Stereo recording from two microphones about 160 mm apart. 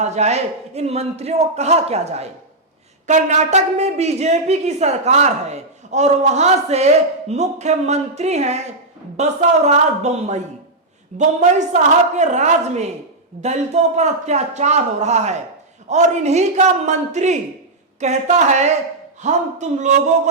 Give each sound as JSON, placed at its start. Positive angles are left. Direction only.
{"t": 0.0, "sound": "a woman's voice", "side_deg": -45}